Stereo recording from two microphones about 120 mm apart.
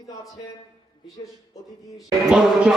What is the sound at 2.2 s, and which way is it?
Speech, 5° right (ahead or behind).